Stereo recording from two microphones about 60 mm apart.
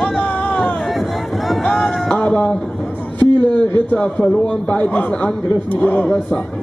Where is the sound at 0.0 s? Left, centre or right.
Left.